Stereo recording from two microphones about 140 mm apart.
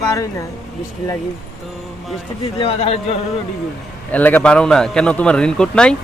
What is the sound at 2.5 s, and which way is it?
Speech, 45° left (ahead or behind).